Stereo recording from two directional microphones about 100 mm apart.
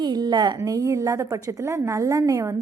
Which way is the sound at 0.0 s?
45° right (ahead or behind).